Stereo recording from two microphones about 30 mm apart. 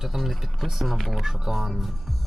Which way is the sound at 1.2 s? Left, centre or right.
Centre.